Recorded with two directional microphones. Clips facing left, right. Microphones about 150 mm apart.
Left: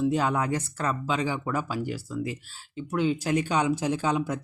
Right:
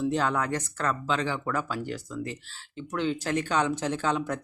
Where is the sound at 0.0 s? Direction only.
10° left (ahead or behind).